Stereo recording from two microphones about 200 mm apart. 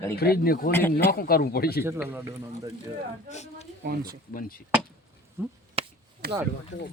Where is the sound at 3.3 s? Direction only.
35° left (ahead or behind).